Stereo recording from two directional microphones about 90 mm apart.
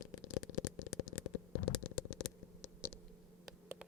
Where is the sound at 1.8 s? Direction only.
10° left (ahead or behind).